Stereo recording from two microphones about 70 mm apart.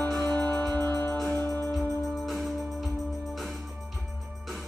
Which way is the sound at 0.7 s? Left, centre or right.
Left.